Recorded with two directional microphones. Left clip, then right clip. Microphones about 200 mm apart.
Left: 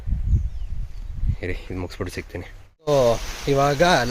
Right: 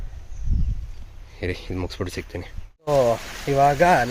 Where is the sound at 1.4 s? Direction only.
10° right (ahead or behind).